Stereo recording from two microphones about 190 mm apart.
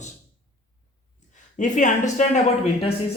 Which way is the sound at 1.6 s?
40° left (ahead or behind).